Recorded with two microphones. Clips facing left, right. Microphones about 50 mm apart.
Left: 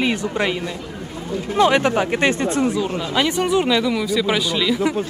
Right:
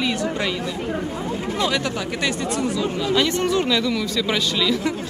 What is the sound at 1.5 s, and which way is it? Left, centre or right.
Speech, left.